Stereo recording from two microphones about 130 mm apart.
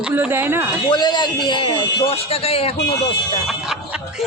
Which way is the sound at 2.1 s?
50° left (ahead or behind).